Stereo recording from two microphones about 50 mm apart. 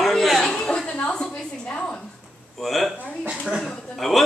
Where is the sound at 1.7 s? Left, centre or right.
Left.